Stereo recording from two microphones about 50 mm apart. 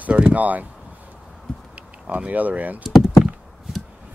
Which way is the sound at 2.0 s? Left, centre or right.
Right.